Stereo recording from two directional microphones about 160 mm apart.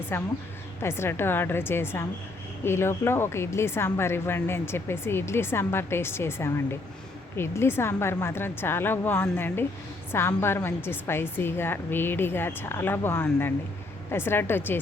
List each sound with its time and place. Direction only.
0.1 s a woman's voice: 15° left (ahead or behind)